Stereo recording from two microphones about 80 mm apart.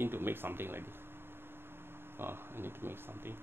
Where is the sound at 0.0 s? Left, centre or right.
Right.